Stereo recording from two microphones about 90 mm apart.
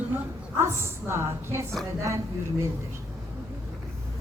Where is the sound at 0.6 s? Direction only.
30° right (ahead or behind).